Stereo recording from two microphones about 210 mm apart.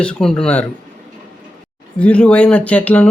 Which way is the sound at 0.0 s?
5° left (ahead or behind).